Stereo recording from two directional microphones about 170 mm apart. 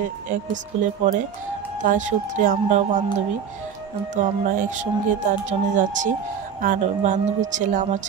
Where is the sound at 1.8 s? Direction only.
50° right (ahead or behind).